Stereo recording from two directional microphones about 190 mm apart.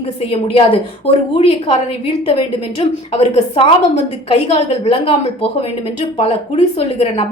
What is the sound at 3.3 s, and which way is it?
A woman's voice, 30° left (ahead or behind).